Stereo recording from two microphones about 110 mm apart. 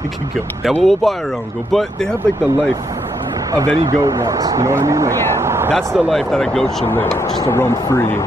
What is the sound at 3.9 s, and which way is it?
Speech, 30° right (ahead or behind).